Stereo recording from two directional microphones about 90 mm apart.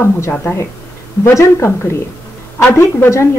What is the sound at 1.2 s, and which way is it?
Speech, 30° left (ahead or behind).